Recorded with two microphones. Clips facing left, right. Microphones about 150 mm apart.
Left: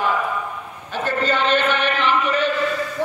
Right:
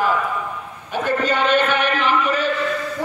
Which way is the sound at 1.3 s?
10° right (ahead or behind).